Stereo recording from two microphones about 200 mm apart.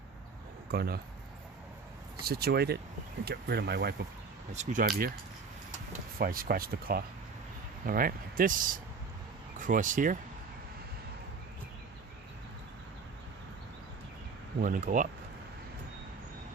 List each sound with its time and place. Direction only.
0.7 s speech: 50° right (ahead or behind)
2.2 s speech: 50° right (ahead or behind)
4.5 s speech: 40° right (ahead or behind)
6.1 s speech: 45° right (ahead or behind)
14.6 s speech: 40° right (ahead or behind)